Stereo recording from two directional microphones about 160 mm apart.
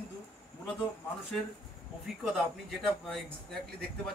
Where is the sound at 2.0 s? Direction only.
Centre (ahead or behind).